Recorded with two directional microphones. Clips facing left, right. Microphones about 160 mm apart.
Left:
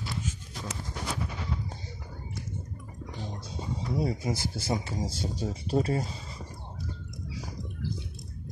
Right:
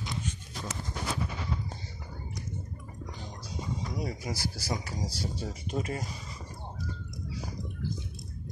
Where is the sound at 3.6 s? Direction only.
30° left (ahead or behind).